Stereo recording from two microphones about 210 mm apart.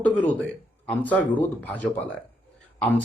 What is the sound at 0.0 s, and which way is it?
Speech, 5° left (ahead or behind).